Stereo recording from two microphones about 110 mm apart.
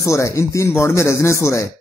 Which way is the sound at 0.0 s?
30° left (ahead or behind).